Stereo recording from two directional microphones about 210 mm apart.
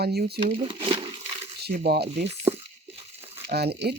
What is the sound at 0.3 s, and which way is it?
Speech, 25° right (ahead or behind).